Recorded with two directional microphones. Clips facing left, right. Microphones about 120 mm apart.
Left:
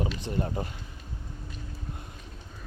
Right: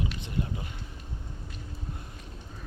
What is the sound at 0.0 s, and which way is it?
Speech, 40° left (ahead or behind).